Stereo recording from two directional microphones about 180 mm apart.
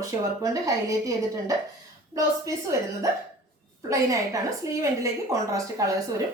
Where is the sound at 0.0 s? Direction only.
20° right (ahead or behind).